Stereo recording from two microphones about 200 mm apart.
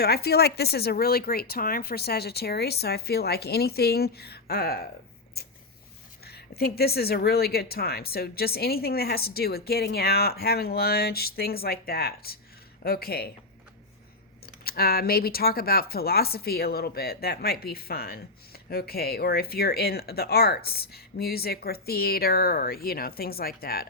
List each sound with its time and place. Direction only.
0.0 s speech: 50° left (ahead or behind)
6.2 s speech: 50° left (ahead or behind)
14.4 s speech: 50° left (ahead or behind)